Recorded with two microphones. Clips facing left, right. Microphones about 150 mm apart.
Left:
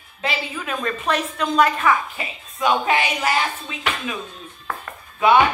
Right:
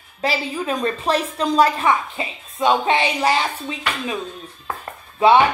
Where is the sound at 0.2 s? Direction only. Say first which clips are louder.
Right 4 dB; 35° right (ahead or behind).